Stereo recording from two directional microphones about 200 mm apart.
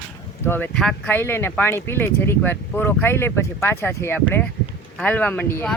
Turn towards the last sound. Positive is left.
turn(degrees=10)  # may be behind; listen again after turning